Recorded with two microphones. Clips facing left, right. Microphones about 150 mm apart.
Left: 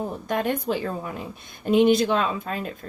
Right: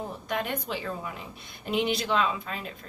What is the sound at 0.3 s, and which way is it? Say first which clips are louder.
A woman's voice: left 7 dB; 45° left (ahead or behind).